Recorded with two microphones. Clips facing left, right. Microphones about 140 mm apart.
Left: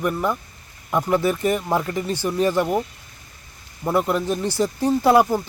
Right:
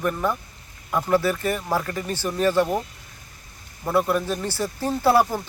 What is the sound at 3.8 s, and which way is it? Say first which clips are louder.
Speech: left 1 dB; 20° left (ahead or behind).